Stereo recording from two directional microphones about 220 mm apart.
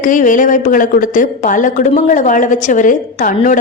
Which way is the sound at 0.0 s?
35° left (ahead or behind).